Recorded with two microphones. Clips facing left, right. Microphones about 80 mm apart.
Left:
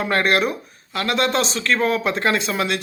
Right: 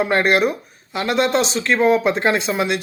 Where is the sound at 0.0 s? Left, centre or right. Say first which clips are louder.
Right 3 dB; centre.